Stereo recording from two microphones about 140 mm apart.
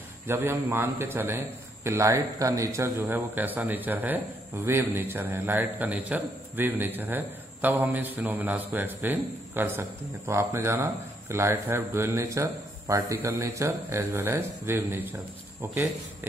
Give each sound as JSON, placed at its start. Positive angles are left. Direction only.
{"t": 0.3, "sound": "a man's voice", "side_deg": -15}